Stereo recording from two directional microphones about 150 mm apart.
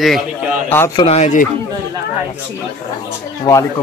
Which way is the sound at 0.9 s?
45° left (ahead or behind).